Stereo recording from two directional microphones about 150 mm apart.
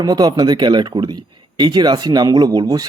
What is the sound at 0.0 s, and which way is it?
Speech, 25° right (ahead or behind).